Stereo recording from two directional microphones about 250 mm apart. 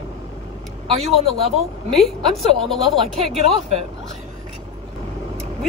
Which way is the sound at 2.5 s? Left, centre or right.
Centre.